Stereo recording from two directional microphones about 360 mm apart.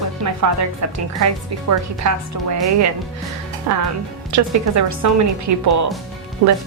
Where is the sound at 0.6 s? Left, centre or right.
Right.